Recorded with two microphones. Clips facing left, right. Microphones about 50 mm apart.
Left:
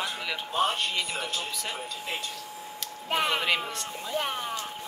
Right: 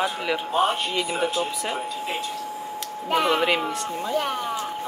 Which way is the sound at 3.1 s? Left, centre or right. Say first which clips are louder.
Right 6 dB; centre.